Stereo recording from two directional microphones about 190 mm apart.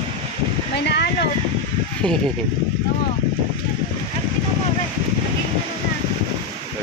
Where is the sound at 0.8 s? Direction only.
60° left (ahead or behind).